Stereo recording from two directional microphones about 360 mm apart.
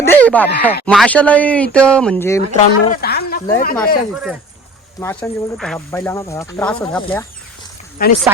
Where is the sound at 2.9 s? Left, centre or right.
Left.